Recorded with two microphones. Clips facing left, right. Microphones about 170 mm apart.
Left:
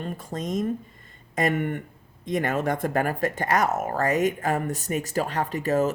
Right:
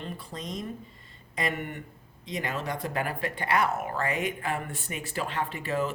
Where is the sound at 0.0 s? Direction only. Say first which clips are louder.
Left 6 dB; 45° left (ahead or behind).